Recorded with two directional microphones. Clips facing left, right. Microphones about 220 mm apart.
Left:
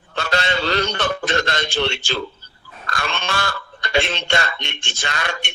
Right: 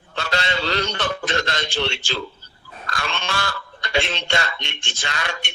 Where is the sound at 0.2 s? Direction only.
55° left (ahead or behind).